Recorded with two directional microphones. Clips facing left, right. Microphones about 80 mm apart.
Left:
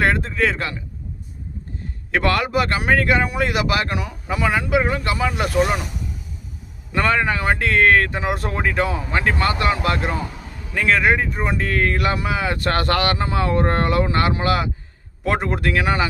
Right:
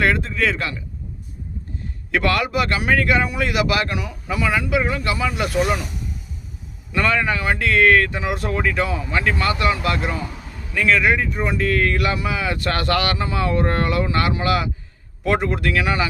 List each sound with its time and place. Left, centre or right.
0.0 s speech: left
2.1 s speech: left
6.9 s speech: left